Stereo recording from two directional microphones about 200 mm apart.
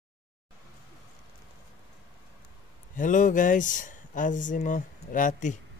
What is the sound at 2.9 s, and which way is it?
Speech, 40° left (ahead or behind).